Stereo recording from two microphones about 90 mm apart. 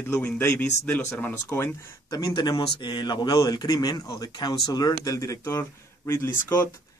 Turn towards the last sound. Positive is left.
turn(degrees=25)  # may be behind; listen again after turning